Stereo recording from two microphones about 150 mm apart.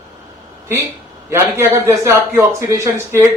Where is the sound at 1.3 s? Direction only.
15° right (ahead or behind).